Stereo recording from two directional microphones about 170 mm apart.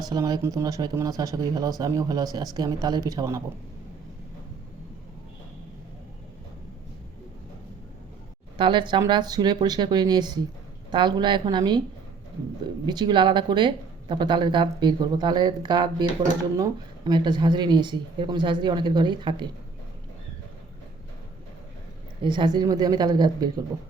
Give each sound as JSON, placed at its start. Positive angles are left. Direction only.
{"t": 0.1, "sound": "speech", "side_deg": -20}
{"t": 8.5, "sound": "speech", "side_deg": -30}
{"t": 12.8, "sound": "speech", "side_deg": -25}
{"t": 22.2, "sound": "speech", "side_deg": -25}